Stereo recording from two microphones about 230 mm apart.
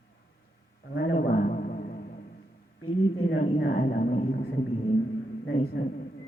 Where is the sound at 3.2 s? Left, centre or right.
Left.